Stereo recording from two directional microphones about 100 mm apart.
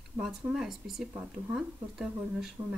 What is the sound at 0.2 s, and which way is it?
Speech, 5° right (ahead or behind).